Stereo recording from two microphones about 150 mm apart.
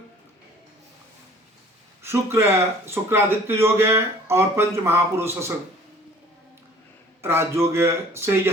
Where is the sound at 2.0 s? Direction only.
15° right (ahead or behind).